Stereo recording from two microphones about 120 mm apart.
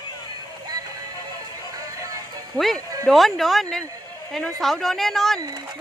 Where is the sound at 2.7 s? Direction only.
30° right (ahead or behind).